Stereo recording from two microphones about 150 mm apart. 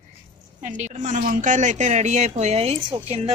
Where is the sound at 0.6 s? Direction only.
55° right (ahead or behind); by 3.3 s 35° right (ahead or behind).